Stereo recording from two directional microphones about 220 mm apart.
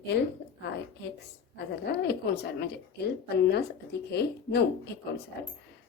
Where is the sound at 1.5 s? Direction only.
50° left (ahead or behind).